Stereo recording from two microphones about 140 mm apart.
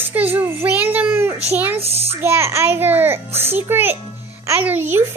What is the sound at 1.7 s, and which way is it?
Speech, 45° right (ahead or behind).